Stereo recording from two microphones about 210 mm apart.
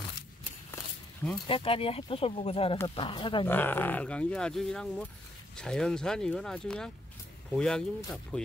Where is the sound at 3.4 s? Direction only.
10° left (ahead or behind).